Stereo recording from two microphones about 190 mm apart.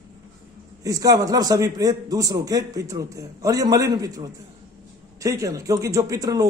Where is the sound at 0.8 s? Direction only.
20° right (ahead or behind).